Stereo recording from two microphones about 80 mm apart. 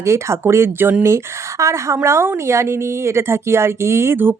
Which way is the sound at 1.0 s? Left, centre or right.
Right.